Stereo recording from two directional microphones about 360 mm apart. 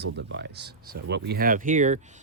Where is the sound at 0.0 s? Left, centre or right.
Right.